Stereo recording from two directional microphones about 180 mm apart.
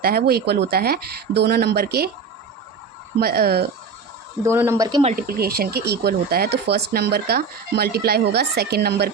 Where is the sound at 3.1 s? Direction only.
60° right (ahead or behind).